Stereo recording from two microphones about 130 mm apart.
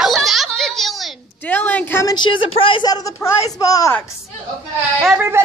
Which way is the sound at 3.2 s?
25° left (ahead or behind).